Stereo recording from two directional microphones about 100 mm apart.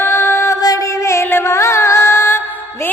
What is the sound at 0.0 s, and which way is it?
Music, 25° left (ahead or behind).